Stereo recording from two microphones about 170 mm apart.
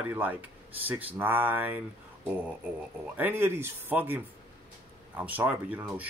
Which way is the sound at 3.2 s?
10° right (ahead or behind).